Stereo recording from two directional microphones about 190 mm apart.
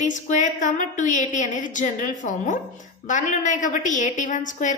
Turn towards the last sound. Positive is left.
turn(degrees=40)  # may be behind; listen again after turning